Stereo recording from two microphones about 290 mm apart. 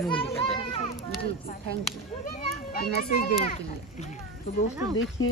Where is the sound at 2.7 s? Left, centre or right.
Left.